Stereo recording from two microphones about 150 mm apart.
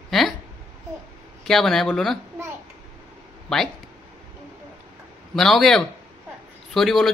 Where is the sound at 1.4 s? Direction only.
5° left (ahead or behind).